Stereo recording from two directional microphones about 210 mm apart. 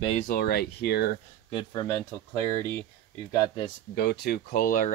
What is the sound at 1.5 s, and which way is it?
Speech, 20° left (ahead or behind).